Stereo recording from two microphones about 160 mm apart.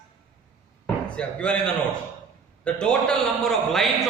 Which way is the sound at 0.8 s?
5° left (ahead or behind).